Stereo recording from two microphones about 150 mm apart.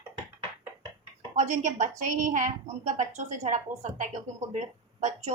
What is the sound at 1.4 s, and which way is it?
Speech, 55° right (ahead or behind).